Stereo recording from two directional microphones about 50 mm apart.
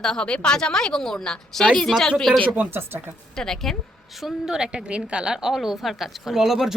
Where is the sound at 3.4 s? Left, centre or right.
Centre.